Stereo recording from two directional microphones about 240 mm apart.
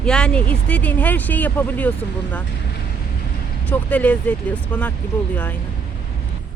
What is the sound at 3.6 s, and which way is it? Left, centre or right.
Speech, centre.